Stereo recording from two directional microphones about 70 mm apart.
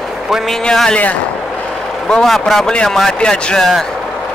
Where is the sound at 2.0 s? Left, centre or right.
Centre.